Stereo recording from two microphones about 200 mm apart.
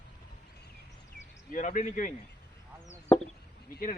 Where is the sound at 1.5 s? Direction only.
35° left (ahead or behind).